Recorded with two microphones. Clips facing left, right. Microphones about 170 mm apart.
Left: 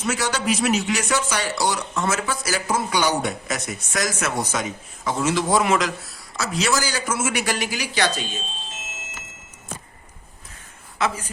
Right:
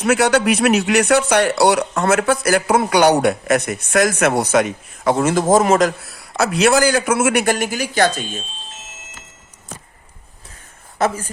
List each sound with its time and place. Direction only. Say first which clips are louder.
0.0 s speech: right 9 dB; 65° right (ahead or behind); by 5.9 s 45° right (ahead or behind)
6.1 s speech: right 9 dB; 60° right (ahead or behind)
10.9 s speech: right 5 dB; 45° right (ahead or behind)